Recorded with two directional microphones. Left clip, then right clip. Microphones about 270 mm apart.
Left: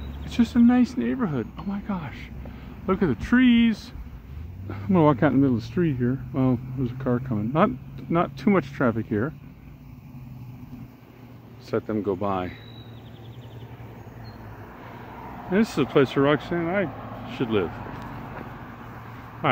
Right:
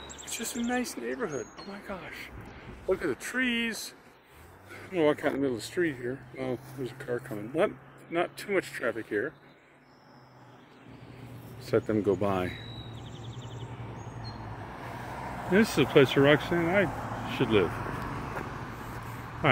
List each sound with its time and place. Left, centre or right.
0.4 s speech: centre
11.7 s speech: centre
14.6 s vehicle: right
15.5 s speech: centre
17.6 s vehicle: left